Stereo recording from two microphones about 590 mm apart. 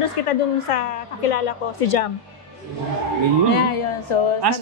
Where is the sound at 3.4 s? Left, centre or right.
Left.